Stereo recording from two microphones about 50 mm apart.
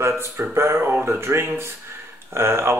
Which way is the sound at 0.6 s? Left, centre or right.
Right.